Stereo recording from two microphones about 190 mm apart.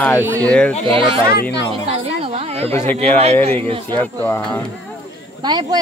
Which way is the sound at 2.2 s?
30° right (ahead or behind).